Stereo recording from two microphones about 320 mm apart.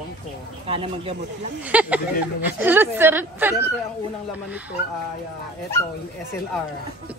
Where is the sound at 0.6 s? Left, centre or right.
Centre.